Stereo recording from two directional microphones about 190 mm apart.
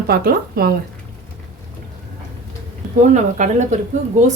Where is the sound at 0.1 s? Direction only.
55° right (ahead or behind).